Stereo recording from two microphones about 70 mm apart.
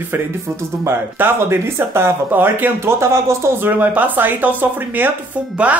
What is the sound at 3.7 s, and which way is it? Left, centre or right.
Speech, right.